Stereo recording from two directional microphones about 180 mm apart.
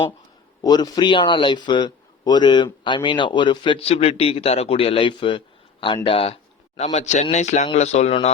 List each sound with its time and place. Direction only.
0.6 s a man's voice: 20° left (ahead or behind); by 8.3 s 35° left (ahead or behind)